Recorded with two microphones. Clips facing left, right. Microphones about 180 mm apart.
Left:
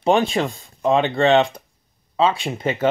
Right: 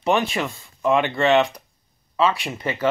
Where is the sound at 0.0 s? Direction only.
30° left (ahead or behind).